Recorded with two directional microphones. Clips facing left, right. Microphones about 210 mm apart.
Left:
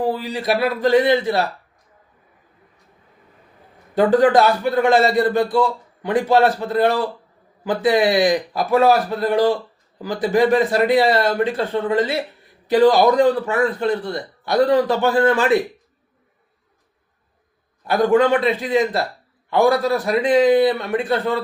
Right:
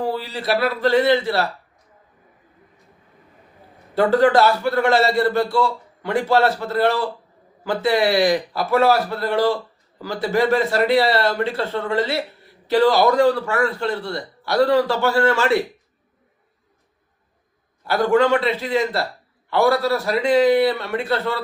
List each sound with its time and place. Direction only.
0.0 s a man's voice: 15° left (ahead or behind)
3.9 s a man's voice: 15° left (ahead or behind)
17.8 s a man's voice: 15° left (ahead or behind)